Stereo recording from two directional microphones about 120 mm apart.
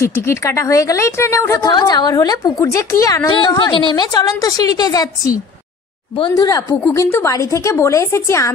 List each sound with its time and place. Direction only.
0.0 s a woman's voice: 25° left (ahead or behind)
1.6 s a woman's voice: 35° left (ahead or behind)
3.3 s a woman's voice: 45° left (ahead or behind); by 8.5 s 25° left (ahead or behind)